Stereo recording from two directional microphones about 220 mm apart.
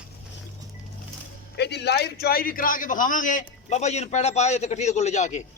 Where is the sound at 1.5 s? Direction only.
50° left (ahead or behind); by 5.4 s 30° left (ahead or behind).